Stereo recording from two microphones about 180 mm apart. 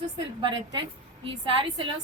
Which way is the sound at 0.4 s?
25° right (ahead or behind).